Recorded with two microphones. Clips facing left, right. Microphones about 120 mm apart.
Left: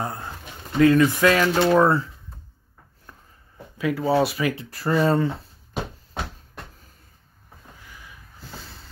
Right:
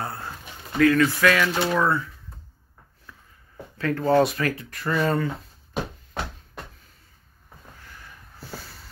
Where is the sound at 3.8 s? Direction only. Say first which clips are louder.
Right 1 dB; 5° left (ahead or behind).